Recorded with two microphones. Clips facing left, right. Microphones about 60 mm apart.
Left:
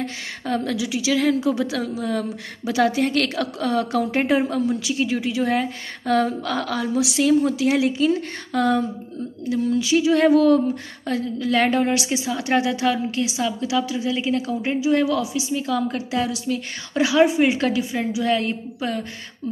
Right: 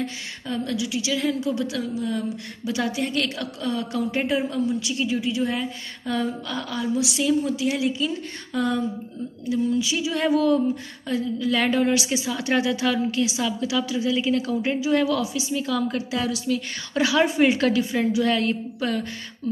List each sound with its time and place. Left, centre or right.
0.0 s a woman's voice: left
4.7 s a woman's voice: left
9.5 s a sound: left
11.8 s a woman's voice: left
17.2 s a woman's voice: centre